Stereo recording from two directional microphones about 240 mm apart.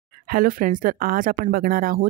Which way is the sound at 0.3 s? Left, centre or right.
Right.